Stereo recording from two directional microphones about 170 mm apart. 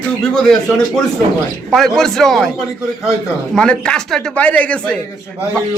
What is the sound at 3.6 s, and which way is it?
A man's voice, 5° left (ahead or behind).